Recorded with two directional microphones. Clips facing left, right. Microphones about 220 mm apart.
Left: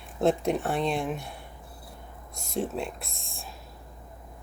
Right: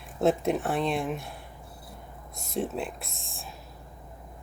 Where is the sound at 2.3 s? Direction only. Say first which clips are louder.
Even; centre (ahead or behind).